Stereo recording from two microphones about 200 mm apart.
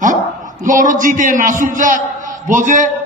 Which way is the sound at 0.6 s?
40° right (ahead or behind).